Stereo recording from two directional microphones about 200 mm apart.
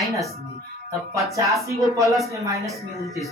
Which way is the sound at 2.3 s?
15° right (ahead or behind).